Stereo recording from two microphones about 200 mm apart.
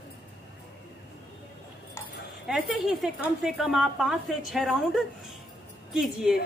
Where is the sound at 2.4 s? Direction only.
Centre (ahead or behind).